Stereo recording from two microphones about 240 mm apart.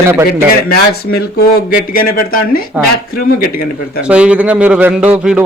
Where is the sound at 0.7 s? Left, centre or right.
Left.